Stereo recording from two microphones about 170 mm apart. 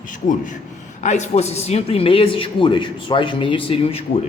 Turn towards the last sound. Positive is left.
turn(degrees=35)  # may be behind; listen again after turning